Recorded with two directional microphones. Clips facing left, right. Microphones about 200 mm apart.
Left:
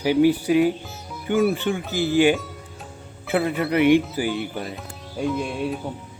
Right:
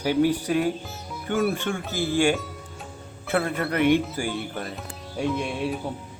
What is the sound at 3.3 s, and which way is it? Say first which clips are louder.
Speech: left 3 dB; centre (ahead or behind).